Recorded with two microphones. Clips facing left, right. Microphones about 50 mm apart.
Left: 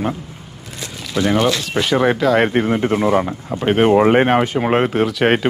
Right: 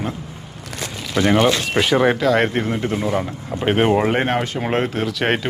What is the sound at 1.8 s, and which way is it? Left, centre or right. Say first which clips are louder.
Speech: left 1 dB; centre.